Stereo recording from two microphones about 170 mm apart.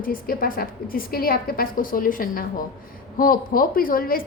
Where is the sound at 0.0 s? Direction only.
55° left (ahead or behind).